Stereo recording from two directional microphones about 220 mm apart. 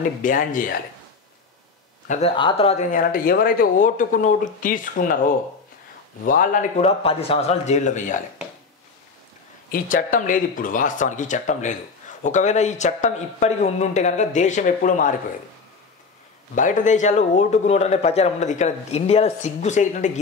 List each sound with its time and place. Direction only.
0.2 s speech: 35° left (ahead or behind)
2.0 s speech: 30° left (ahead or behind)
6.2 s speech: 40° left (ahead or behind)
7.0 s speech: 25° left (ahead or behind)
9.7 s speech: 40° left (ahead or behind)
16.5 s speech: 35° left (ahead or behind)